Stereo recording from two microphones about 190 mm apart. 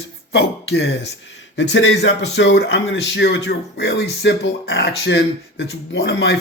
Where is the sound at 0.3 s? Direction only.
60° left (ahead or behind).